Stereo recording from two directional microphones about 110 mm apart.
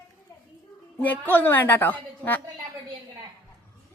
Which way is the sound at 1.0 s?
15° left (ahead or behind).